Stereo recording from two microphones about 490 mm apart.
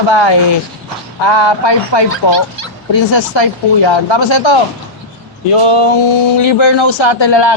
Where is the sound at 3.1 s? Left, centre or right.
Left.